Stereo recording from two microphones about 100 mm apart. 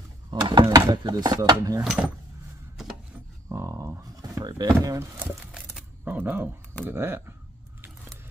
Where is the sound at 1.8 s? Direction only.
5° right (ahead or behind).